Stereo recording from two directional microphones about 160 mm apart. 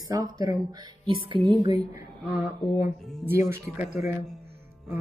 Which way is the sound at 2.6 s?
30° left (ahead or behind).